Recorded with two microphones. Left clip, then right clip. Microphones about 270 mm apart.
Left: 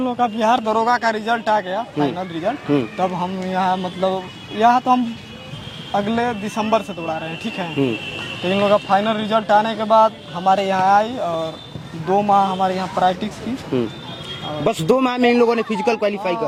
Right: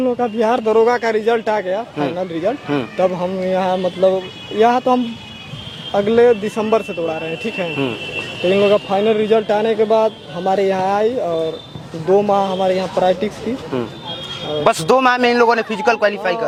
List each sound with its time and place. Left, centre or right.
0.0 s speech: left
12.1 s speech: left
13.7 s speech: right
14.6 s a man's voice: right